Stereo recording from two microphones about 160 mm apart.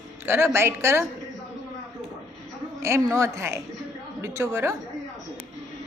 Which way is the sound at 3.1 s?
20° right (ahead or behind).